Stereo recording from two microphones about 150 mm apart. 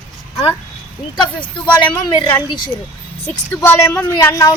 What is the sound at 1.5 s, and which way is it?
Speech, 30° left (ahead or behind).